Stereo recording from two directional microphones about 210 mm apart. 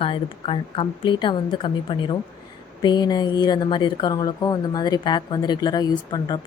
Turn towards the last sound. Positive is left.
turn(degrees=20)  # may be behind; listen again after turning